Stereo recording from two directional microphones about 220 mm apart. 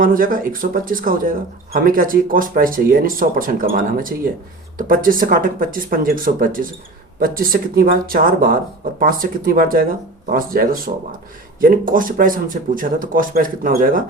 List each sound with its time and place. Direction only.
0.0 s speech: 40° right (ahead or behind)